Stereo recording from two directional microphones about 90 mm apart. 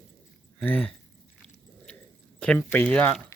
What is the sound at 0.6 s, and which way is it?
Speech, 15° left (ahead or behind).